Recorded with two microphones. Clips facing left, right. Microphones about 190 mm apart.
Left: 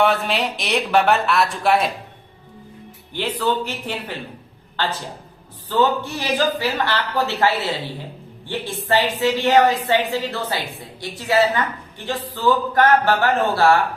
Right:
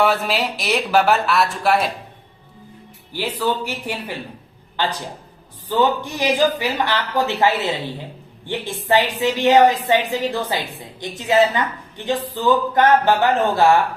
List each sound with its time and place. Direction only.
0.0 s speech: centre (ahead or behind)
3.1 s a woman's voice: 10° right (ahead or behind)
5.6 s a woman's voice: 15° right (ahead or behind)